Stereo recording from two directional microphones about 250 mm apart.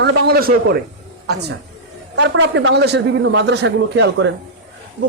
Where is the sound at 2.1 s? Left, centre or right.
Right.